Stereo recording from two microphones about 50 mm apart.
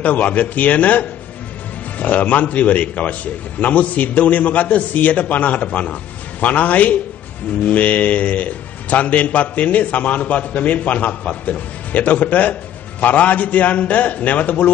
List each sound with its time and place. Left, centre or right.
0.0 s a man's voice: left